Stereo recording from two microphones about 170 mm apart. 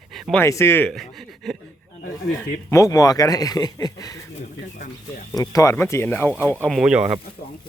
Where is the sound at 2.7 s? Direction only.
20° left (ahead or behind).